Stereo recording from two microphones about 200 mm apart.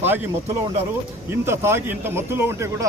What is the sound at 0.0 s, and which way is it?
A man's voice, 10° right (ahead or behind).